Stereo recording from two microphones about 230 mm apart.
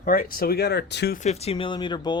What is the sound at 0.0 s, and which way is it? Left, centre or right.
Speech, left.